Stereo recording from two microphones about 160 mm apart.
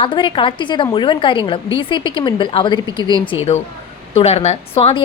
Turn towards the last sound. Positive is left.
turn(degrees=40)  # may be behind; listen again after turning